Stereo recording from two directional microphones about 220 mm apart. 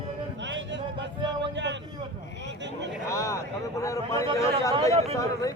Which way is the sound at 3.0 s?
15° left (ahead or behind).